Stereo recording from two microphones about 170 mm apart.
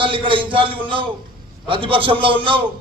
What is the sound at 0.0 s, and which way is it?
A man's voice, 30° right (ahead or behind).